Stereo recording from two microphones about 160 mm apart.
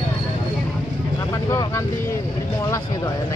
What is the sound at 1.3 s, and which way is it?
Speech, 20° left (ahead or behind).